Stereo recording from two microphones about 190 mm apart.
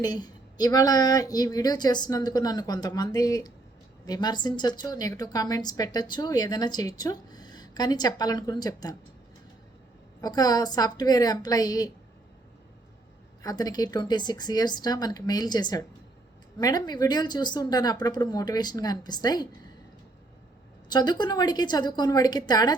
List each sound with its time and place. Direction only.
0.0 s a woman's voice: 20° left (ahead or behind)
10.2 s a woman's voice: 20° left (ahead or behind)
13.4 s a woman's voice: 20° left (ahead or behind)
20.9 s a woman's voice: 20° left (ahead or behind)